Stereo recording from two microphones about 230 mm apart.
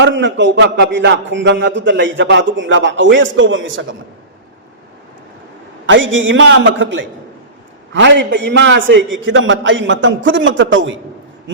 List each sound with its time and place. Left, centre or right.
0.0 s a man's voice: right
5.8 s a man's voice: right